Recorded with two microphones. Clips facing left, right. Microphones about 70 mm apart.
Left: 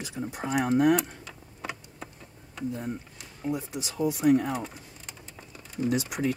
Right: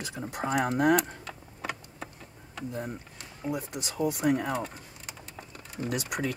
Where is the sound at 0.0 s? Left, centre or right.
Right.